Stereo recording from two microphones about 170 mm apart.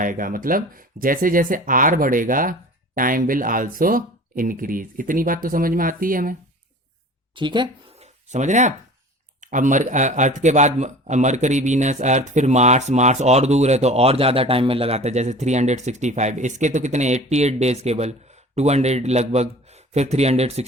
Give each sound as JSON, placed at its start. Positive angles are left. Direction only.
{"t": 0.0, "sound": "speech", "side_deg": -55}
{"t": 7.3, "sound": "speech", "side_deg": -25}
{"t": 8.0, "sound": "a sound", "side_deg": -45}
{"t": 9.4, "sound": "speech", "side_deg": -50}